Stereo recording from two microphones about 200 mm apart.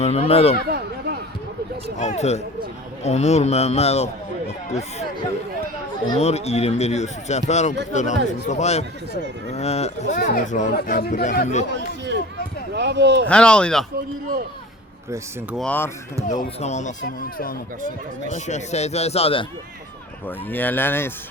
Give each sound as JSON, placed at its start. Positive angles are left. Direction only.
{"t": 0.0, "sound": "speech", "side_deg": 30}
{"t": 0.7, "sound": "a sound", "side_deg": -55}
{"t": 2.0, "sound": "speech", "side_deg": 35}
{"t": 6.1, "sound": "speech", "side_deg": 30}
{"t": 11.7, "sound": "a sound", "side_deg": -60}
{"t": 12.7, "sound": "speech", "side_deg": -60}
{"t": 13.2, "sound": "speech", "side_deg": 5}
{"t": 15.5, "sound": "speech", "side_deg": 5}
{"t": 16.4, "sound": "speech", "side_deg": 35}
{"t": 17.2, "sound": "speech", "side_deg": 45}
{"t": 18.3, "sound": "speech", "side_deg": 35}
{"t": 20.2, "sound": "speech", "side_deg": 10}